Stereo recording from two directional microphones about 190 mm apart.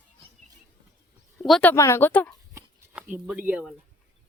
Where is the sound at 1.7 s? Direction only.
15° left (ahead or behind).